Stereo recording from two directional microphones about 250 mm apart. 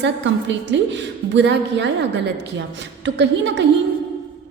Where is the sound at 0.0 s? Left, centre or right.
Right.